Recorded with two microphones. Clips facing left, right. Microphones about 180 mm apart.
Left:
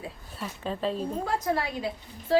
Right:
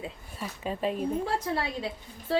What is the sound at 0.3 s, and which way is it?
Speech, 10° right (ahead or behind).